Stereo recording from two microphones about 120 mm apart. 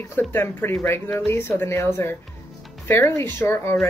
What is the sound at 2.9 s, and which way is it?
Speech, 20° left (ahead or behind).